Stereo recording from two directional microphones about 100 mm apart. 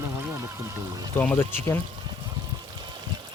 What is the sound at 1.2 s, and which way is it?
Speech, 20° left (ahead or behind).